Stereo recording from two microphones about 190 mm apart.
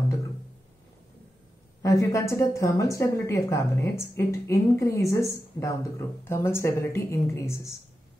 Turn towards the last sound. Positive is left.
turn(degrees=15)  # may be behind; listen again after turning